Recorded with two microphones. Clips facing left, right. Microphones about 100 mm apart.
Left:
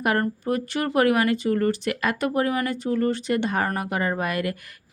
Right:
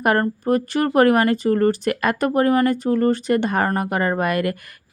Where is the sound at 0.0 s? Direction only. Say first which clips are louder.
Right 4 dB; 45° right (ahead or behind).